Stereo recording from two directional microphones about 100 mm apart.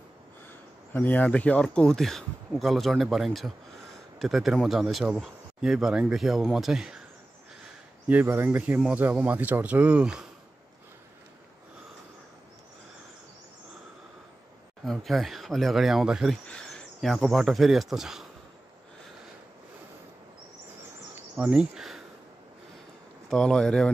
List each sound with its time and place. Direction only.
0.9 s speech: 15° left (ahead or behind); by 7.0 s 5° right (ahead or behind)
8.1 s speech: 20° right (ahead or behind)
14.9 s speech: centre (ahead or behind)
16.4 s speech: 5° left (ahead or behind)
21.4 s speech: 10° right (ahead or behind)
23.3 s speech: 5° left (ahead or behind)